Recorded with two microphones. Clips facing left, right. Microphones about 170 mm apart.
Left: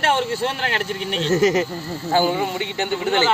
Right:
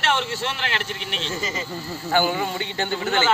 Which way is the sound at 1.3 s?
70° left (ahead or behind).